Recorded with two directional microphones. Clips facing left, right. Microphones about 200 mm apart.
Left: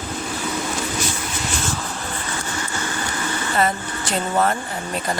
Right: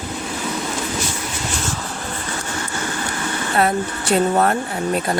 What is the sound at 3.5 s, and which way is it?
Speech, 60° right (ahead or behind).